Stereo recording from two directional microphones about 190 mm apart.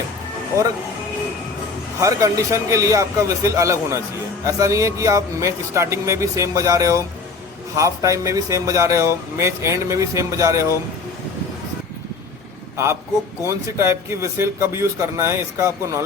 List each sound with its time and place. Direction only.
2.0 s speech: 15° right (ahead or behind)
12.7 s a man's voice: 15° right (ahead or behind)